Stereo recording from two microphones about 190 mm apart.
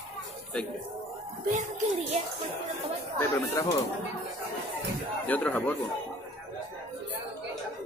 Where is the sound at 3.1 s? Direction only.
15° left (ahead or behind).